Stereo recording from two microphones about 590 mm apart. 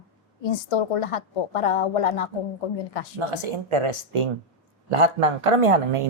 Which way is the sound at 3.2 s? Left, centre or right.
Right.